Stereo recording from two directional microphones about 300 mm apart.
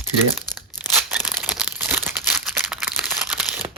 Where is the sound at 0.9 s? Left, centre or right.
Centre.